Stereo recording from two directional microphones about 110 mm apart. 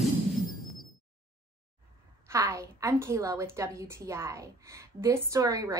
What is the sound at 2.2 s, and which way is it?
A woman's voice, 30° right (ahead or behind).